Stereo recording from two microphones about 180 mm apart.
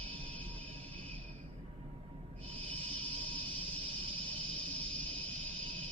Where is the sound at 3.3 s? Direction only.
30° right (ahead or behind).